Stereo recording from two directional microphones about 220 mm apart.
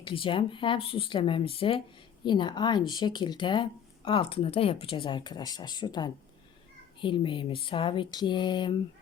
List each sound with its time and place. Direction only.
0.0 s speech: 25° left (ahead or behind)